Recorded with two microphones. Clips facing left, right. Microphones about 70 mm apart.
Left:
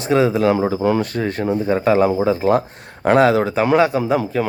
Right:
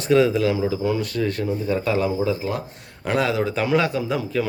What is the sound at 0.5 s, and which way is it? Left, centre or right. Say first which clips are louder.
Speech: left 5 dB; left.